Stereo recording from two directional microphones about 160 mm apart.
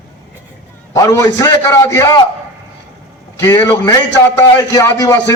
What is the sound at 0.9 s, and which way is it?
A man's voice, 20° left (ahead or behind).